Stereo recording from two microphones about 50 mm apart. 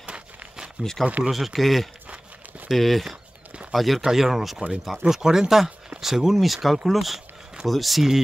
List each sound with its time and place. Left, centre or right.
0.0 s walk: right
0.8 s speech: right
1.3 s speech: centre